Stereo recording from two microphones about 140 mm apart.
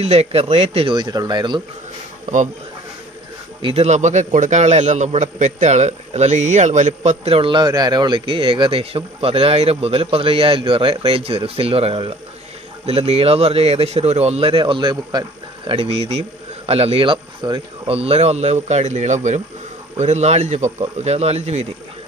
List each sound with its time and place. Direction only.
0.0 s a man's voice: 50° right (ahead or behind)
0.9 s speech: 30° right (ahead or behind)
2.2 s speech: 60° right (ahead or behind)
3.6 s a man's voice: 50° right (ahead or behind); by 17.6 s 35° right (ahead or behind)
17.8 s a man's voice: 45° right (ahead or behind)